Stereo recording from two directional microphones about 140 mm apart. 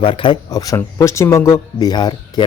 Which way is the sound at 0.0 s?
40° left (ahead or behind).